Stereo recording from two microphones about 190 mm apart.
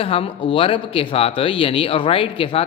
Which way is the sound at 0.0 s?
30° left (ahead or behind).